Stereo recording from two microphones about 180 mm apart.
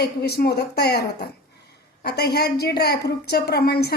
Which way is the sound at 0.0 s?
60° left (ahead or behind).